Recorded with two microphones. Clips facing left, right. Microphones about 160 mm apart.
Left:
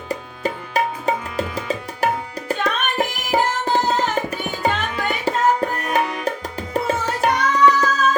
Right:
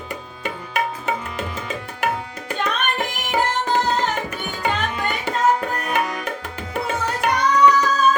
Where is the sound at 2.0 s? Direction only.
35° left (ahead or behind).